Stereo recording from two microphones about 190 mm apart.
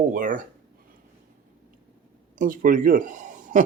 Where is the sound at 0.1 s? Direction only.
45° right (ahead or behind).